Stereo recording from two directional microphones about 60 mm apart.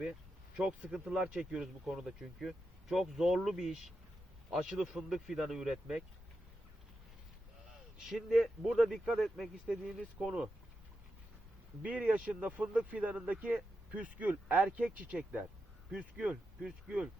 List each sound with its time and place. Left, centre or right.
0.5 s speech: centre
7.9 s a man's voice: centre
11.8 s speech: right
16.6 s speech: centre